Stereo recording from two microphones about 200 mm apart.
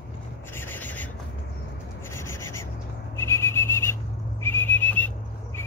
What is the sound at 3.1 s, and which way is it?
Whistle, 15° left (ahead or behind).